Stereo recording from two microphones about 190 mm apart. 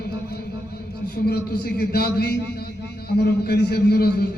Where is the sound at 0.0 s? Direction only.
55° left (ahead or behind).